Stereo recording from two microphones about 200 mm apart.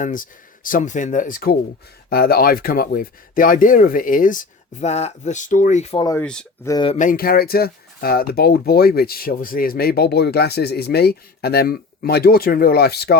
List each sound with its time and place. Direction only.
0.0 s speech: 40° left (ahead or behind)
6.1 s speech: 10° left (ahead or behind)
6.7 s speech: 20° left (ahead or behind)
7.0 s speech: 45° left (ahead or behind)